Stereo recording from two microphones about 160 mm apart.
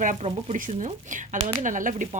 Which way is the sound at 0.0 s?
45° right (ahead or behind).